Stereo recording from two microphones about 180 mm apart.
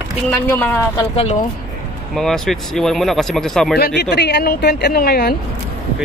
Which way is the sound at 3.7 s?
65° left (ahead or behind).